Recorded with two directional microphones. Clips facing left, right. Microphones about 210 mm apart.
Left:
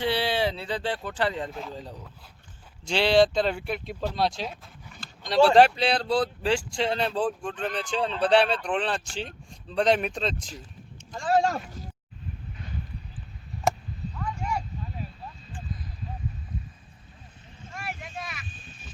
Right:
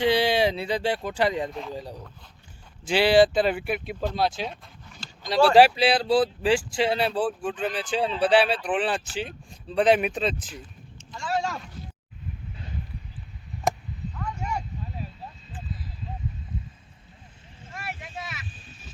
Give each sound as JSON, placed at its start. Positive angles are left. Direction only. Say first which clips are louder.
{"t": 0.0, "sound": "speech", "louder": "right 4 dB", "side_deg": -15}
{"t": 11.1, "sound": "speech", "louder": "left 5 dB", "side_deg": 45}
{"t": 14.2, "sound": "a sound", "louder": "left 1 dB", "side_deg": -5}
{"t": 17.7, "sound": "vehicle", "louder": "even", "side_deg": 0}